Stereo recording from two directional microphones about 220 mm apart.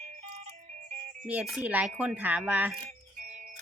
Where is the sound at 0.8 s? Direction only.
35° right (ahead or behind).